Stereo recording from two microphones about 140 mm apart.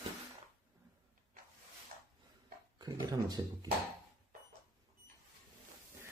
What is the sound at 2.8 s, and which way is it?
Speech, 30° right (ahead or behind).